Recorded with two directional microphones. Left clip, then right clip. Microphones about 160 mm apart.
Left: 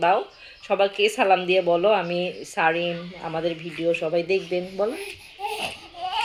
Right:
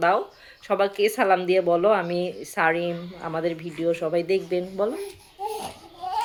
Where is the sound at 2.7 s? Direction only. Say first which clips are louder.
Left 1 dB; 35° right (ahead or behind).